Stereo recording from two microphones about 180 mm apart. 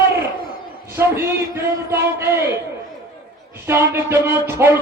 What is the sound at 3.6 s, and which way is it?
Speech, 15° right (ahead or behind).